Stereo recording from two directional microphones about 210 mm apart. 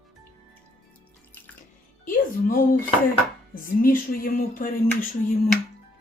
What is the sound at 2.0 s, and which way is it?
Speech, 40° left (ahead or behind).